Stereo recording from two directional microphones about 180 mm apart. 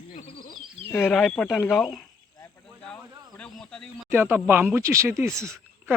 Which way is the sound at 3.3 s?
5° left (ahead or behind).